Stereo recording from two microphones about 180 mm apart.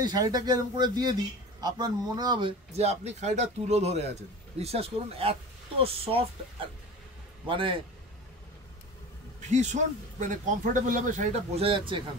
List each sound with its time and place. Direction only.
0.0 s a man's voice: 20° right (ahead or behind)
7.4 s speech: 30° right (ahead or behind)
9.5 s a man's voice: 40° right (ahead or behind)